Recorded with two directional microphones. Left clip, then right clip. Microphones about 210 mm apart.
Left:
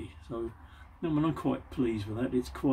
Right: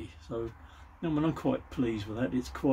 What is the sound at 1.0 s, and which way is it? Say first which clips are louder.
Speech: even; 20° right (ahead or behind).